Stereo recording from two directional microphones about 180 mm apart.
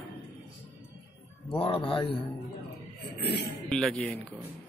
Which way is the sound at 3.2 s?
65° left (ahead or behind).